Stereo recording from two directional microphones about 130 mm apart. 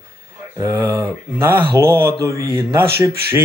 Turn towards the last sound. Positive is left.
turn(degrees=-20)  # may be behind; listen again after turning